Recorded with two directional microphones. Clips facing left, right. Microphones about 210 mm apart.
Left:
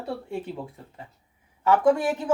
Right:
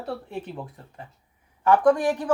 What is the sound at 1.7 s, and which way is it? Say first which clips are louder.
Speech: right 1 dB; 5° left (ahead or behind).